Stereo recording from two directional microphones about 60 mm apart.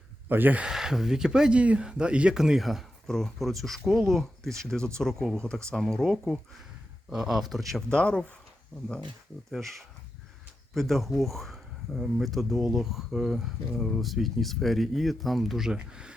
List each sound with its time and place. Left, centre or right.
0.3 s speech: right
0.6 s speech: centre
7.1 s speech: centre
7.9 s speech: centre
8.7 s speech: centre
10.8 s speech: centre